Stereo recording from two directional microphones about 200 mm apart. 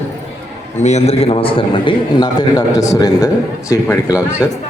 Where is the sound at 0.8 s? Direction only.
35° left (ahead or behind); by 3.2 s 15° left (ahead or behind).